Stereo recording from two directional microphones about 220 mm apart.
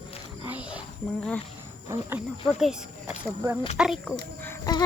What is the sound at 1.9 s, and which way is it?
Speech, 10° right (ahead or behind).